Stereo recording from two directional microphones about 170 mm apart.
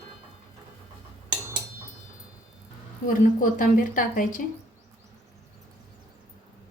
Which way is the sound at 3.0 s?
55° left (ahead or behind).